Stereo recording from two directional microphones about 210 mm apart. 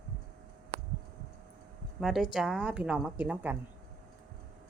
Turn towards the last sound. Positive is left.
turn(degrees=-10)  # may be behind; listen again after turning